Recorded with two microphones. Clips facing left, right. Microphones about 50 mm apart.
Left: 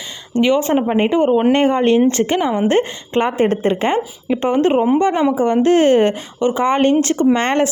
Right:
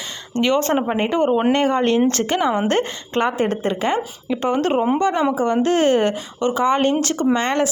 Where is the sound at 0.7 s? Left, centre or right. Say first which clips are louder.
Left 4 dB; centre.